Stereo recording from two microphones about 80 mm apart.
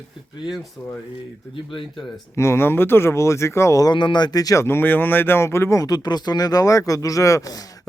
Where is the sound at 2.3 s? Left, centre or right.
Left.